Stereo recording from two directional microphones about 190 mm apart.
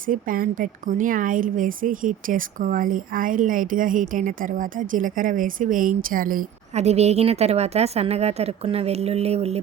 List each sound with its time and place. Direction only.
0.1 s speech: 45° right (ahead or behind)